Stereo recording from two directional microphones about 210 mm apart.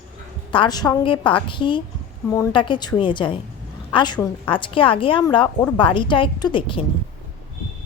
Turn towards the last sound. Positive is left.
turn(degrees=25)  # may be behind; listen again after turning